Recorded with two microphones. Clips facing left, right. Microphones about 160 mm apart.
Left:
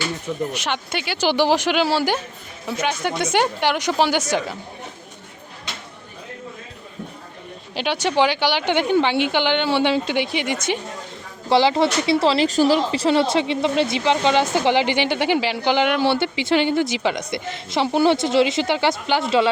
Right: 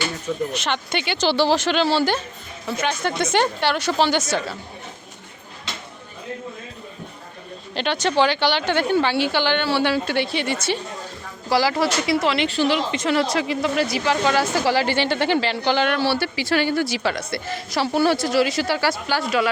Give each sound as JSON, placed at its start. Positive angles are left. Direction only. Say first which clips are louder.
{"t": 0.5, "sound": "speech", "louder": "right 1 dB", "side_deg": 10}
{"t": 7.8, "sound": "speech", "louder": "even", "side_deg": 10}